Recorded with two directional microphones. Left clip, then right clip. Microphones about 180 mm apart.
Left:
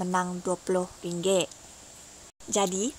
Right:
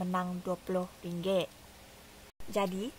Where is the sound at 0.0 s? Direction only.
30° left (ahead or behind).